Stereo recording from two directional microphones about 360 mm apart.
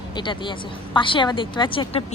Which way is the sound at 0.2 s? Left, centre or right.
Centre.